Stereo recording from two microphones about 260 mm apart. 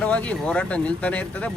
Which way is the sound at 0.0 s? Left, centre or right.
Centre.